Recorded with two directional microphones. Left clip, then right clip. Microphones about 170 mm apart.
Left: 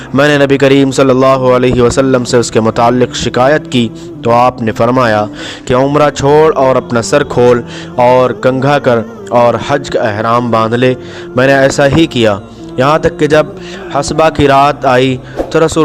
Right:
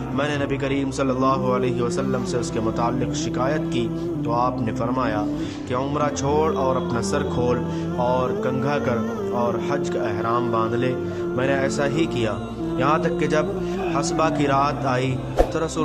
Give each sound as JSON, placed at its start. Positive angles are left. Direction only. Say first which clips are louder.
{"t": 0.2, "sound": "a man's voice", "louder": "left 17 dB", "side_deg": 60}